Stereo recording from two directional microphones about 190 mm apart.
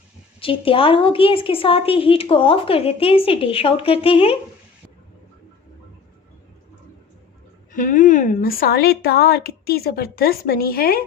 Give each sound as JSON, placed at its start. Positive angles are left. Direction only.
{"t": 0.3, "sound": "a woman's voice", "side_deg": 30}
{"t": 7.7, "sound": "a woman's voice", "side_deg": 45}